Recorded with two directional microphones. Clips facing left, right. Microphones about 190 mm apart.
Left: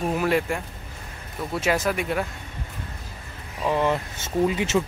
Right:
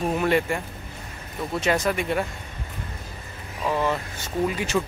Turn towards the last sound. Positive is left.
turn(degrees=20)  # may be behind; listen again after turning